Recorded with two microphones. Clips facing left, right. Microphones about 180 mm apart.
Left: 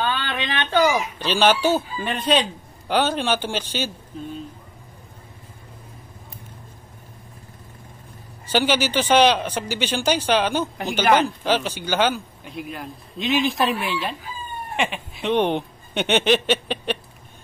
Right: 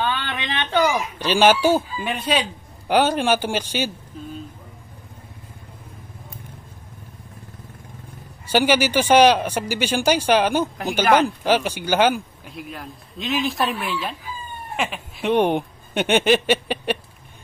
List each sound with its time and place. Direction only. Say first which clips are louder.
0.0 s a sound: even; 15° right (ahead or behind)
1.1 s speech: right 2 dB; 10° right (ahead or behind)
8.5 s speech: right 2 dB; 10° right (ahead or behind)
12.4 s speech: left 2 dB; centre (ahead or behind)